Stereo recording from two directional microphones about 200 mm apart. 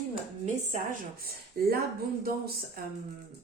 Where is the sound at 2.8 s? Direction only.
45° right (ahead or behind).